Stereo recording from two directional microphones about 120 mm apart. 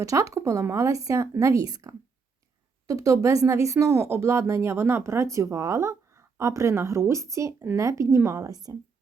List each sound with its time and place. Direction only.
0.0 s speech: 25° right (ahead or behind)